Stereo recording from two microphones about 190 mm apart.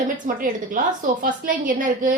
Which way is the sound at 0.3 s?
45° right (ahead or behind).